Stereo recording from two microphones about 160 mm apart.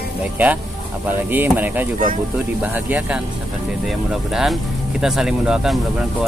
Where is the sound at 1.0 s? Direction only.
10° right (ahead or behind).